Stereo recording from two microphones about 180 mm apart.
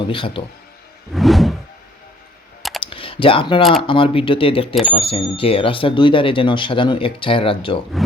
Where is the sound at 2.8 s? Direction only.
30° left (ahead or behind).